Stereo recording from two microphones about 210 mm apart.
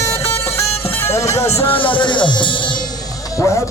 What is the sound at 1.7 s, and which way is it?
Speech, 25° left (ahead or behind).